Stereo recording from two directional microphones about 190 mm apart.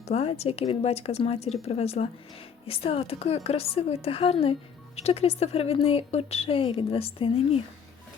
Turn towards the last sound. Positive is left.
turn(degrees=30)  # may be behind; listen again after turning